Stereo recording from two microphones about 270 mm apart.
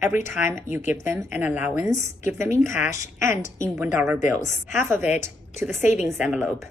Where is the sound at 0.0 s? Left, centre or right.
Left.